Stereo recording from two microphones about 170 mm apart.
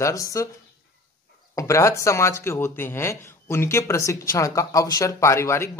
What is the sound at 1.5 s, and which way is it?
Speech, 20° left (ahead or behind).